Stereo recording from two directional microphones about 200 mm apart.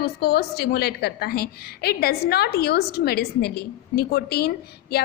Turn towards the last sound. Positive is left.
turn(degrees=50)  # may be behind; listen again after turning